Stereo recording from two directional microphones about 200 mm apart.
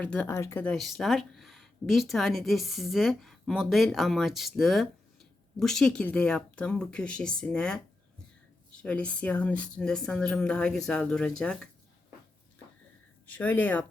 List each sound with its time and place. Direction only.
0.0 s speech: 5° left (ahead or behind)
8.8 s speech: 5° left (ahead or behind)
13.2 s speech: 10° left (ahead or behind)